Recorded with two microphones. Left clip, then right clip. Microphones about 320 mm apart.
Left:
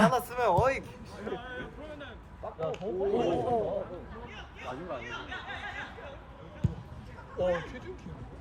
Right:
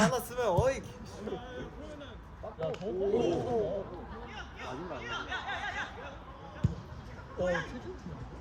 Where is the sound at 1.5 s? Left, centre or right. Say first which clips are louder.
Left 3 dB; centre.